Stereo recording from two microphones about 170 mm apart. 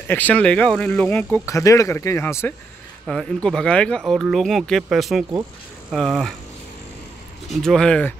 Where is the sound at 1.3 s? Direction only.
20° left (ahead or behind); by 6.3 s centre (ahead or behind).